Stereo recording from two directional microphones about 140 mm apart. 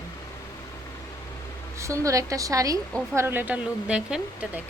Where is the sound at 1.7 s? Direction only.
20° right (ahead or behind); by 4.5 s 5° right (ahead or behind).